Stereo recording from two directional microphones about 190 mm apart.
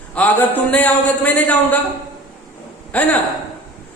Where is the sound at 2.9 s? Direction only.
5° left (ahead or behind).